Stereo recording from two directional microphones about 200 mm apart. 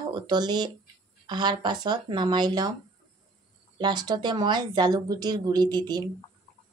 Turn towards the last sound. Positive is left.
turn(degrees=-20)  # may be behind; listen again after turning